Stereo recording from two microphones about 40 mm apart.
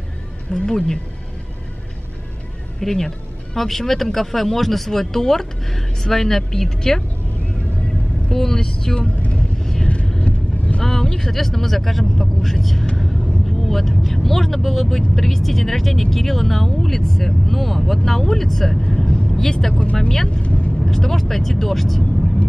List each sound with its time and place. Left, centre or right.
0.5 s speech: centre
2.8 s speech: centre
8.3 s speech: centre
9.6 s vehicle: centre
10.2 s vehicle: left
10.8 s speech: centre
19.7 s speech: left
20.0 s speech: centre
20.2 s vehicle: left
20.8 s speech: centre